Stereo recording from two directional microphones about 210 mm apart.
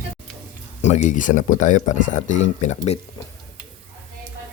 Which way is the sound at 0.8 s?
35° left (ahead or behind).